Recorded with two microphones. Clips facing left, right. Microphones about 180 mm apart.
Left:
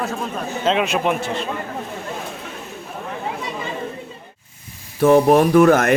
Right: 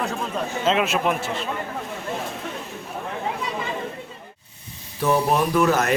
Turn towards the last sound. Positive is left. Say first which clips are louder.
# left 7 dB
turn(degrees=50)  # may be behind; listen again after turning